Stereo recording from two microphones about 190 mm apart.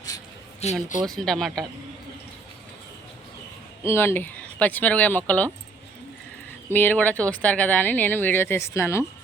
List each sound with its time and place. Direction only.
0.6 s speech: 40° left (ahead or behind)
1.0 s speech: centre (ahead or behind)
3.8 s speech: 10° left (ahead or behind)
6.7 s speech: 10° left (ahead or behind)